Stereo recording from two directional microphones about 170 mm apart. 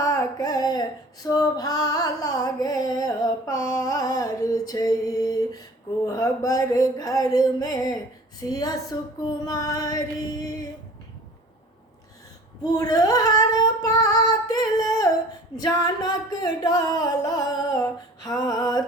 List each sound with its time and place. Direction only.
0.0 s female singing: 20° left (ahead or behind)
6.1 s singing: 20° left (ahead or behind)
12.6 s female singing: 20° left (ahead or behind)
15.5 s singing: 25° left (ahead or behind)